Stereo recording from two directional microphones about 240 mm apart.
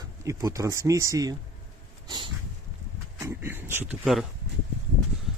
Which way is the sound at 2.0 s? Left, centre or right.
Centre.